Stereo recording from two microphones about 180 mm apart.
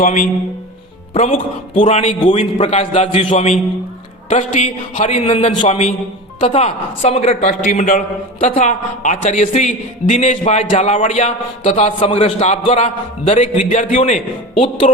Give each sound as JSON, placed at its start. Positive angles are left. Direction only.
{"t": 0.0, "sound": "speech", "side_deg": 45}
{"t": 1.1, "sound": "a man's voice", "side_deg": 35}